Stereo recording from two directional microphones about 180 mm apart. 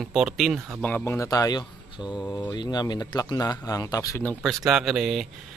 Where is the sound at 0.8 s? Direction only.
10° left (ahead or behind).